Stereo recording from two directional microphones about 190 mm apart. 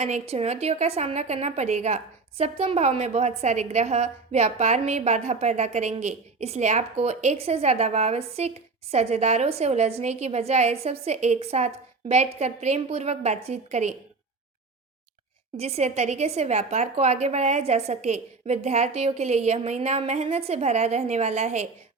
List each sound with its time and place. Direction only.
0.0 s a woman's voice: 35° right (ahead or behind)
15.5 s a woman's voice: 35° right (ahead or behind)